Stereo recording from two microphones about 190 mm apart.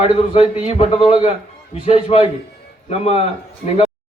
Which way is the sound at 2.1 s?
30° left (ahead or behind).